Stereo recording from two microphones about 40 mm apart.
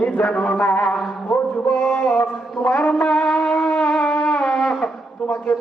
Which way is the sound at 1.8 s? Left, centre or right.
Centre.